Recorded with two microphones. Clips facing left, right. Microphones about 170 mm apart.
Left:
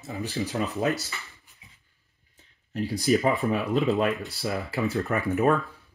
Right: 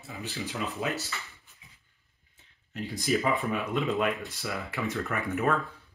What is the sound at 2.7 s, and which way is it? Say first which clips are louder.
Speech: left 5 dB; 35° left (ahead or behind).